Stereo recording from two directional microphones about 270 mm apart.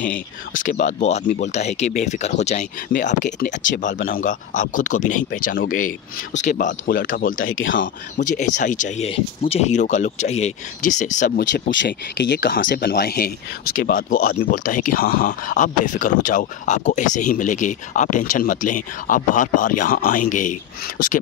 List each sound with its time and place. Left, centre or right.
0.6 s speech: left
7.5 s speech: left
8.5 s speech: left